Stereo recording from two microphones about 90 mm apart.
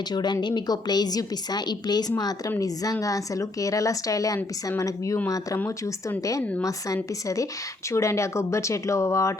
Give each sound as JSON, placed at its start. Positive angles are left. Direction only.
{"t": 0.1, "sound": "a woman's voice", "side_deg": 50}